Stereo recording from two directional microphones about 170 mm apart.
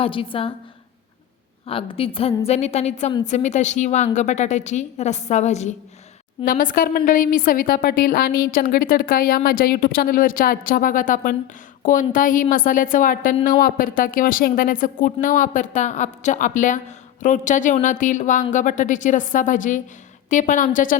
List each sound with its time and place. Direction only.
0.0 s a woman's voice: 30° left (ahead or behind)
1.6 s a woman's voice: 35° left (ahead or behind)
6.4 s a woman's voice: 55° left (ahead or behind)